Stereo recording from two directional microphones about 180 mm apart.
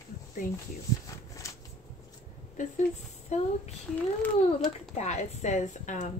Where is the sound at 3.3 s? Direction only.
40° left (ahead or behind).